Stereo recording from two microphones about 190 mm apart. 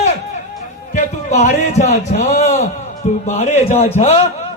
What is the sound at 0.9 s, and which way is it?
A man's voice, 40° left (ahead or behind).